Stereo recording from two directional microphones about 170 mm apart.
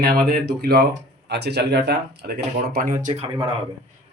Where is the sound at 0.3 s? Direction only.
65° right (ahead or behind).